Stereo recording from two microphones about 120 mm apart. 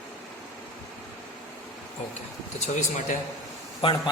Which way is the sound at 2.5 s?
90° left.